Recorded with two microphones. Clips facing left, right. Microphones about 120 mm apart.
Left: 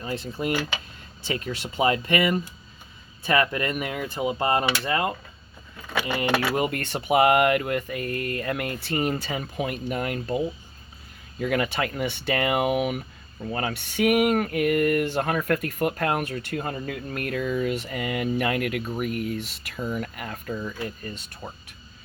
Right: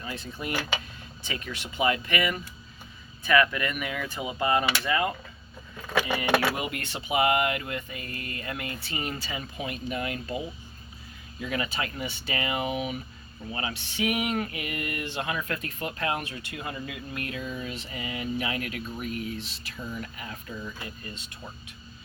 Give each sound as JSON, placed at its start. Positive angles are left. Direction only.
{"t": 0.0, "sound": "speech", "side_deg": 35}
{"t": 4.0, "sound": "speech", "side_deg": 25}
{"t": 6.6, "sound": "a sound", "side_deg": 45}
{"t": 11.3, "sound": "speech", "side_deg": 55}
{"t": 13.5, "sound": "a sound", "side_deg": 50}
{"t": 18.9, "sound": "speech", "side_deg": 60}